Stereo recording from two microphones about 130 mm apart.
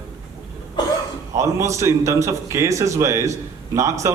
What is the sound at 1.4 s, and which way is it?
A man's voice, 25° right (ahead or behind).